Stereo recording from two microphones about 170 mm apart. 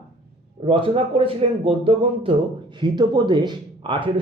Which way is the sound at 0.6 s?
30° right (ahead or behind).